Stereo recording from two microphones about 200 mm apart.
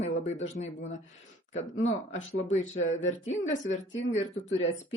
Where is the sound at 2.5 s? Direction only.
35° left (ahead or behind).